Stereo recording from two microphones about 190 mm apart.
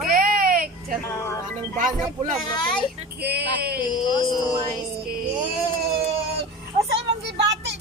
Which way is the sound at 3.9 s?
20° left (ahead or behind).